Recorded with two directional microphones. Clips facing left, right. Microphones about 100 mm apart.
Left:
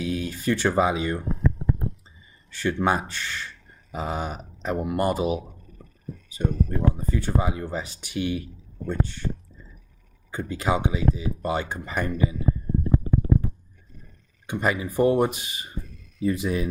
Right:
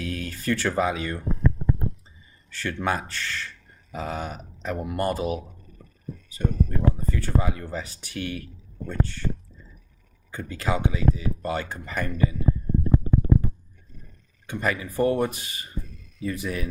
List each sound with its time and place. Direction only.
0.0 s speech: 15° left (ahead or behind)
2.5 s speech: 15° left (ahead or behind)
10.3 s speech: 20° left (ahead or behind)
14.4 s speech: 20° left (ahead or behind)